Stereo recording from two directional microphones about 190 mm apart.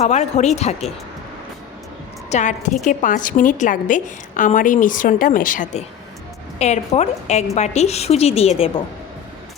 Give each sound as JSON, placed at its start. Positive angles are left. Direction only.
{"t": 0.0, "sound": "a woman's voice", "side_deg": 35}
{"t": 2.3, "sound": "a woman's voice", "side_deg": 40}